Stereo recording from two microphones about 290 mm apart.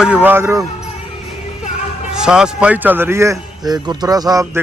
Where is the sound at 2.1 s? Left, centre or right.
Centre.